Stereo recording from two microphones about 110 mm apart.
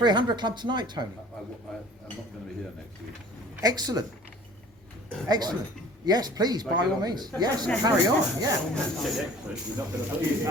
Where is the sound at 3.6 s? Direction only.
35° right (ahead or behind).